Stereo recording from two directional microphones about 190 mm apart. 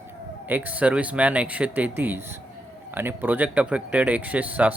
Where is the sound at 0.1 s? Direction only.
10° right (ahead or behind).